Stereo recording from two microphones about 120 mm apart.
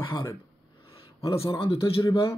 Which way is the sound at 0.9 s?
50° left (ahead or behind).